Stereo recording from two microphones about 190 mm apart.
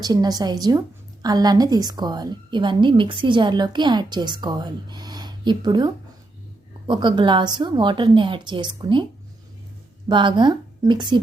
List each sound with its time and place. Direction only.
0.0 s a woman's voice: 20° right (ahead or behind)
10.1 s a woman's voice: 25° right (ahead or behind)